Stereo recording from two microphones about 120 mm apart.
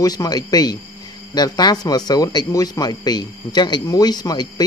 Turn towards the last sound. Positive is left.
turn(degrees=35)  # may be behind; listen again after turning